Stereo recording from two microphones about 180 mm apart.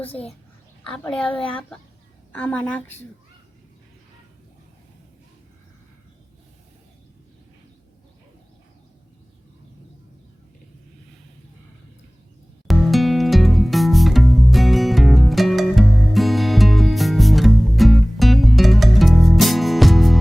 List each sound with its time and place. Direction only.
0.1 s a child's voice: 35° left (ahead or behind)
0.9 s a child's voice: 5° left (ahead or behind)
12.6 s music: centre (ahead or behind)